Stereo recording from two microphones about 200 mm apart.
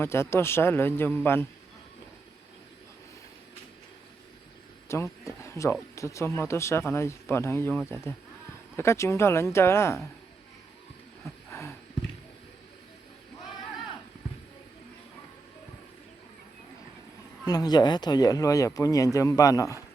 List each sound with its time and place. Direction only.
0.0 s speech: 10° left (ahead or behind)
4.9 s speech: 15° left (ahead or behind)
17.4 s speech: 20° left (ahead or behind)